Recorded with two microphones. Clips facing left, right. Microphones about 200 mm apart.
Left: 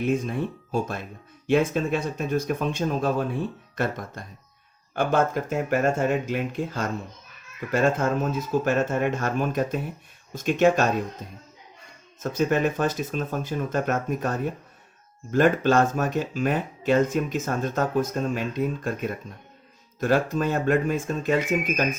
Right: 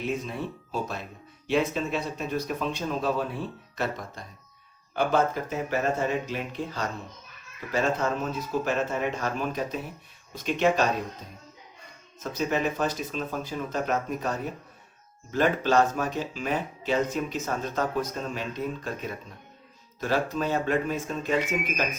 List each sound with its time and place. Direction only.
0.1 s speech: 50° left (ahead or behind)
12.2 s speech: 50° left (ahead or behind)